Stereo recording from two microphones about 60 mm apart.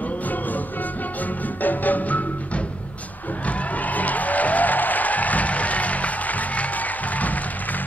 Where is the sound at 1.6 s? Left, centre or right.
Left.